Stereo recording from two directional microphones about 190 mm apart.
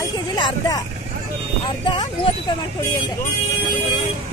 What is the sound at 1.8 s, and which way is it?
Speech, 25° left (ahead or behind).